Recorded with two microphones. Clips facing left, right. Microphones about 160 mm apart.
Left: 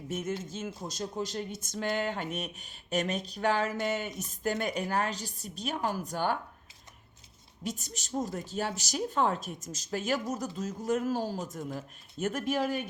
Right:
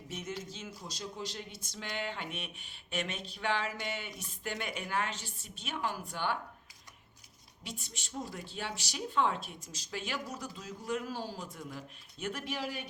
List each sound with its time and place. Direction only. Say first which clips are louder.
0.1 s speech: left 7 dB; 50° left (ahead or behind)
7.6 s speech: left 8 dB; 45° left (ahead or behind)